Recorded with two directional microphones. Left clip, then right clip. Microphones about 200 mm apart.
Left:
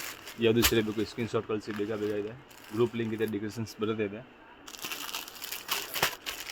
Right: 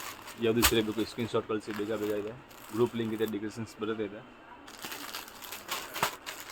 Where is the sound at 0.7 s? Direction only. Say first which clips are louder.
Left 1 dB; 25° left (ahead or behind).